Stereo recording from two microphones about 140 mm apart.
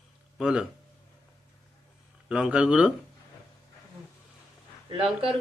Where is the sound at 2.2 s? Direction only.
5° right (ahead or behind).